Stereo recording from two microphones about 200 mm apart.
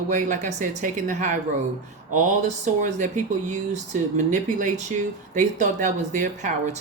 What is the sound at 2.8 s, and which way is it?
Speech, 40° right (ahead or behind).